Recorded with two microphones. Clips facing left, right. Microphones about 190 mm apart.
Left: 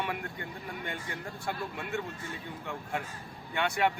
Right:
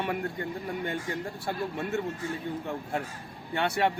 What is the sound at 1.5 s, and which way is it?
Speech, 40° right (ahead or behind).